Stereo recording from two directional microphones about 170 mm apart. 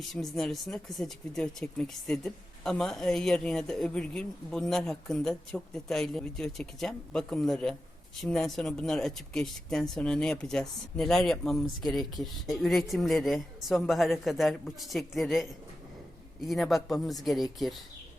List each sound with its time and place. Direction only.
0.1 s speech: centre (ahead or behind)